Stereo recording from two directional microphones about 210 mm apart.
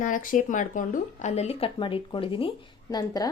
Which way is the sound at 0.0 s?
40° left (ahead or behind).